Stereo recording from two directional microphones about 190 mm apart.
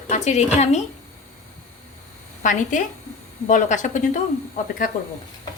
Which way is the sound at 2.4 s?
40° left (ahead or behind).